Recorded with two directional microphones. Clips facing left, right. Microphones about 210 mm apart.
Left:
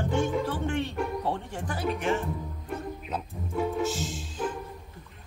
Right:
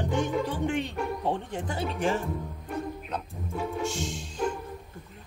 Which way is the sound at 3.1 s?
5° left (ahead or behind).